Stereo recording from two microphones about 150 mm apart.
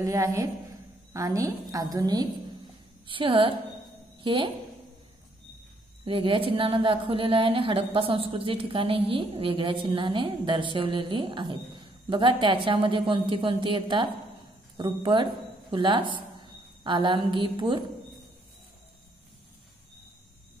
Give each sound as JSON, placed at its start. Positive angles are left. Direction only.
{"t": 0.0, "sound": "a woman's voice", "side_deg": -20}
{"t": 6.0, "sound": "a woman's voice", "side_deg": -35}